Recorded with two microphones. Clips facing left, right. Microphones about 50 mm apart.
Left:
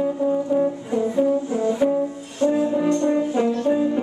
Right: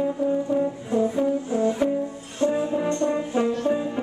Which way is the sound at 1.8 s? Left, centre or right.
Centre.